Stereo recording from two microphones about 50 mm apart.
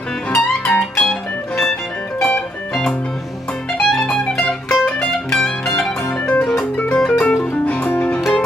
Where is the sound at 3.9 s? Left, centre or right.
Centre.